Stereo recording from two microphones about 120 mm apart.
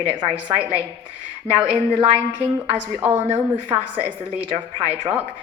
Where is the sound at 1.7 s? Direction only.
45° right (ahead or behind).